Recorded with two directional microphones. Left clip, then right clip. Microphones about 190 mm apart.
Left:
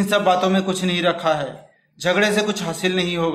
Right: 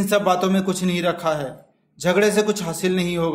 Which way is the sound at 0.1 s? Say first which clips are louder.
Left 1 dB; 35° right (ahead or behind).